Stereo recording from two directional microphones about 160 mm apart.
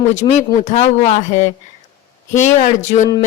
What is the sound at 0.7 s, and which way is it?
Speech, 45° left (ahead or behind).